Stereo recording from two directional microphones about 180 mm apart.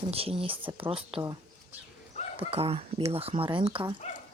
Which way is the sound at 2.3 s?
35° right (ahead or behind).